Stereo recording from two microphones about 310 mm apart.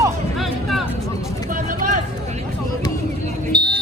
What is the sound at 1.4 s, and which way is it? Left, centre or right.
Speech, right.